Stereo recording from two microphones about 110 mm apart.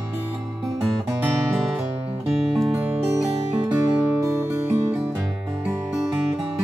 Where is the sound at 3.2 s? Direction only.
10° right (ahead or behind).